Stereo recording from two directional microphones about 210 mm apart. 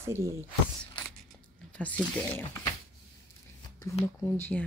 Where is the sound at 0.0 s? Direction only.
15° right (ahead or behind).